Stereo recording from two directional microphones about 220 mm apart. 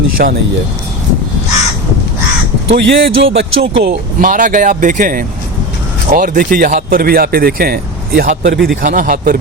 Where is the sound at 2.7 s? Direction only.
55° right (ahead or behind).